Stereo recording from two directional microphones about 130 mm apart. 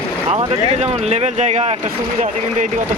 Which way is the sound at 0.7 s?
55° right (ahead or behind).